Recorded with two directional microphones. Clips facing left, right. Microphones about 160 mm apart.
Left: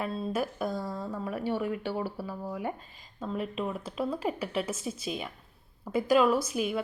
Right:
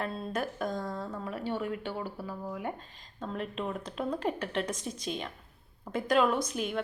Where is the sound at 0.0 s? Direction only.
5° left (ahead or behind).